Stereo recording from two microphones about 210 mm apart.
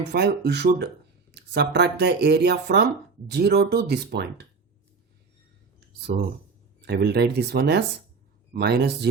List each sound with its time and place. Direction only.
0.1 s speech: 50° right (ahead or behind)
6.1 s speech: 40° right (ahead or behind)